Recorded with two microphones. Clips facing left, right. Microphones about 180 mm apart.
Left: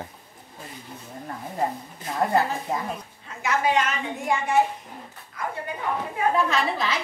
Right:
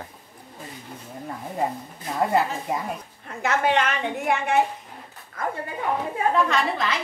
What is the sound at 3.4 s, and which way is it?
A woman's voice, 60° right (ahead or behind).